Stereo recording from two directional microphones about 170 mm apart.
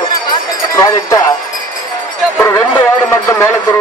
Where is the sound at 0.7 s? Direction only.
20° left (ahead or behind).